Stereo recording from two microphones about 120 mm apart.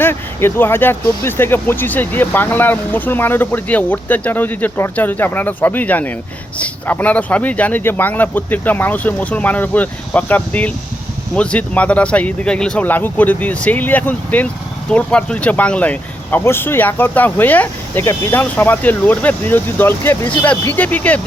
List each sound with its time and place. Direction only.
0.0 s speech: 20° left (ahead or behind)